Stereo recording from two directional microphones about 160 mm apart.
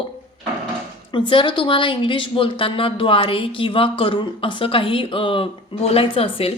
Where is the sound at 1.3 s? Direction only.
30° left (ahead or behind).